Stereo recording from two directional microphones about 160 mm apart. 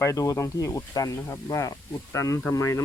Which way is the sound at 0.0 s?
20° left (ahead or behind).